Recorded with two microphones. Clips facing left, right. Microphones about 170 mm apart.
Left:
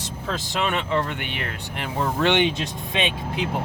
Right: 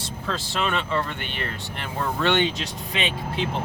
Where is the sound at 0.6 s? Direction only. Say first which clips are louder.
Left 2 dB; 15° left (ahead or behind).